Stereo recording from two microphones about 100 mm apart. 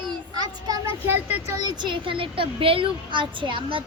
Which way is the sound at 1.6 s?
45° right (ahead or behind).